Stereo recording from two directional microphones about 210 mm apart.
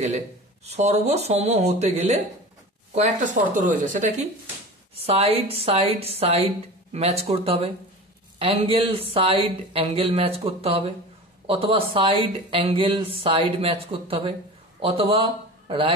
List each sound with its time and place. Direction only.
0.7 s speech: 30° right (ahead or behind)